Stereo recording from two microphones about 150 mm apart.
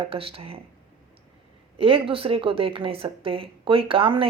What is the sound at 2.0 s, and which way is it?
Speech, 40° right (ahead or behind).